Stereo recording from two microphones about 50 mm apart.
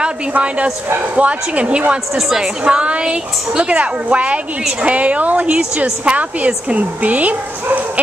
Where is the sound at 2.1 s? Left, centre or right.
Centre.